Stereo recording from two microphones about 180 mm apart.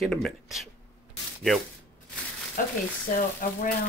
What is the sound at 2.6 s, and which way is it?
Speech, 50° left (ahead or behind).